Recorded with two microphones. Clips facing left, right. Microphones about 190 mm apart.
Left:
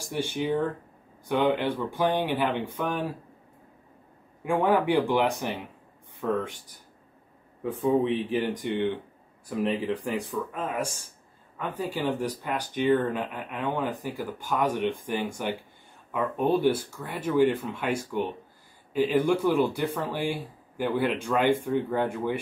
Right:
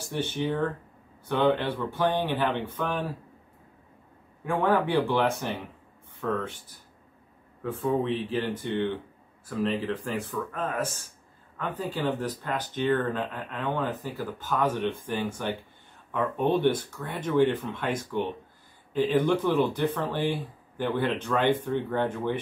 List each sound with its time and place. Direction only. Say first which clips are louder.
0.0 s speech: even; 10° left (ahead or behind)
4.5 s speech: left 2 dB; 15° left (ahead or behind)
7.6 s speech: left 3 dB; 15° left (ahead or behind)